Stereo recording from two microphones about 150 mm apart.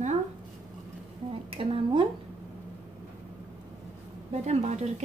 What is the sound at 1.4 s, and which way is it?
Music, 40° right (ahead or behind).